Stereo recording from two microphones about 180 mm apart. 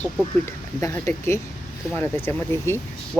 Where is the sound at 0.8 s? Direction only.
15° left (ahead or behind).